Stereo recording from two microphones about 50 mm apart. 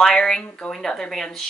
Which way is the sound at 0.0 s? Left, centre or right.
Centre.